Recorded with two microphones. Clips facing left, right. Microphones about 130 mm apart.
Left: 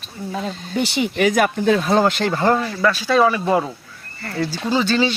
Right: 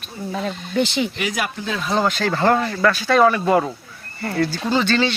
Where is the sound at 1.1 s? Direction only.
50° left (ahead or behind).